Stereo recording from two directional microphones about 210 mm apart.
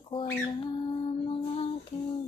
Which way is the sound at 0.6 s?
20° left (ahead or behind).